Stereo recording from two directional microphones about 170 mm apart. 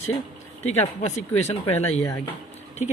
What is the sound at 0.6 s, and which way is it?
Speech, 40° left (ahead or behind).